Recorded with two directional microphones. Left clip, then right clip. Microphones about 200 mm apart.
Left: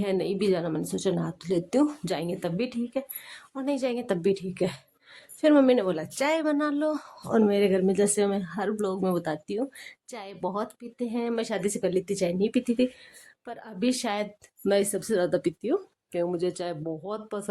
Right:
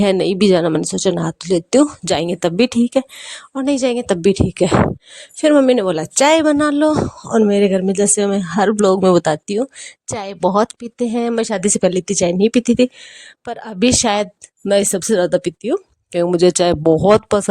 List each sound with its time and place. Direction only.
0.0 s speech: 50° right (ahead or behind)